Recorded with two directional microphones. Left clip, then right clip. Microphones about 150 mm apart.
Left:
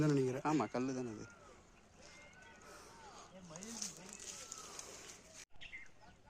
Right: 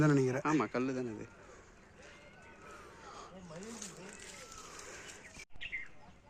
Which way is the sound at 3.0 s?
30° right (ahead or behind).